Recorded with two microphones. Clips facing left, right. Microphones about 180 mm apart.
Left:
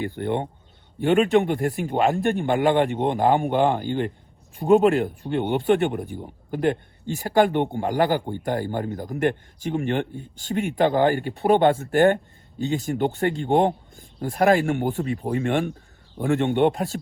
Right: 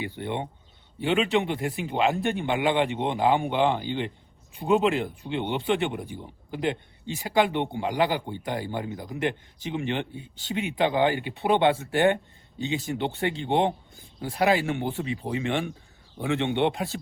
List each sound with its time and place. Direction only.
0.0 s a man's voice: 50° left (ahead or behind)
16.5 s speech: 45° left (ahead or behind)